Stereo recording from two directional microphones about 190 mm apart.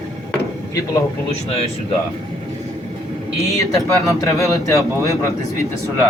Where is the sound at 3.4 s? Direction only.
15° left (ahead or behind).